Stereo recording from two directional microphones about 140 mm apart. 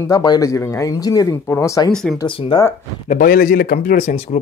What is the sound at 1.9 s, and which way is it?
Speech, 5° left (ahead or behind).